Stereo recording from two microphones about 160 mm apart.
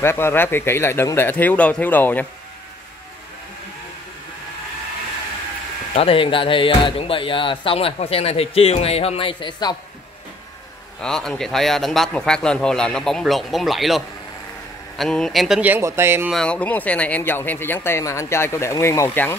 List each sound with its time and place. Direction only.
0.0 s speech: 15° left (ahead or behind)
5.9 s speech: 35° left (ahead or behind)
11.0 s a man's voice: 5° left (ahead or behind); by 16.3 s 15° right (ahead or behind)
16.3 s speech: 5° left (ahead or behind)